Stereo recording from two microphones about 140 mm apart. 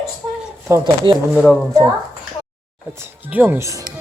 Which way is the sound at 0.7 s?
20° right (ahead or behind).